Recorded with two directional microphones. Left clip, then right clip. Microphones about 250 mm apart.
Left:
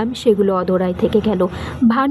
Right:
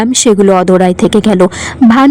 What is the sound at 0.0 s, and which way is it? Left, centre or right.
A woman's voice, right.